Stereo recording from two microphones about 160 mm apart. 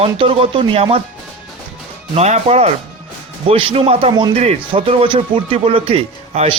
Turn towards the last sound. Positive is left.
turn(degrees=-40)  # may be behind; listen again after turning